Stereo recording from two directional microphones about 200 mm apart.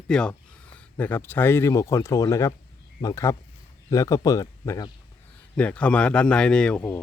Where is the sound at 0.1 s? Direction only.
5° left (ahead or behind).